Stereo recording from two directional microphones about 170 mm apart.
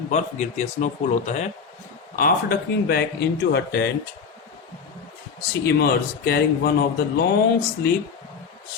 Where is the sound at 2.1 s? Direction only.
60° left (ahead or behind).